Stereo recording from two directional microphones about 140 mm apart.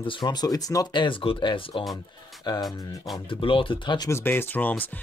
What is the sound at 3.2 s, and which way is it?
Speech, 40° left (ahead or behind).